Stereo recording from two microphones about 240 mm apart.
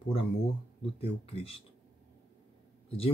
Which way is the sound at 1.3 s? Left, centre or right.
Left.